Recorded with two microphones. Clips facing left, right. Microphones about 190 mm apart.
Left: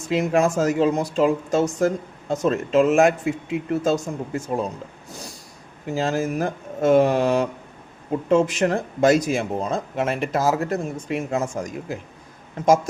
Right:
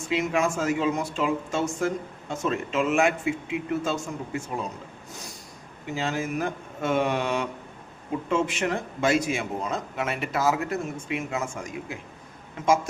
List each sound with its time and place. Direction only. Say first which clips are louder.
0.1 s speech: left 5 dB; 40° left (ahead or behind)
5.8 s speech: left 6 dB; 40° left (ahead or behind)